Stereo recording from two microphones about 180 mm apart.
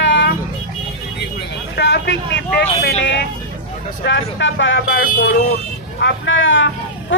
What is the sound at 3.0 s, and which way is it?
Vehicle, 90° left.